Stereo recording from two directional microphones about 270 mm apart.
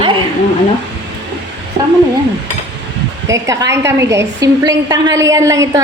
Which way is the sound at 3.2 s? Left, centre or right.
Centre.